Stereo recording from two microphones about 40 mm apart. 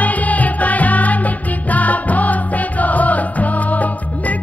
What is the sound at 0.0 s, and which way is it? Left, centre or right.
Music, left.